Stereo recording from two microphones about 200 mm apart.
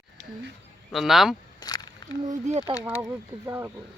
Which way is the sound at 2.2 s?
35° right (ahead or behind).